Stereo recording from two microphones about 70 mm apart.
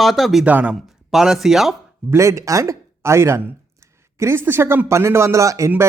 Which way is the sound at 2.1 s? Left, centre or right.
Right.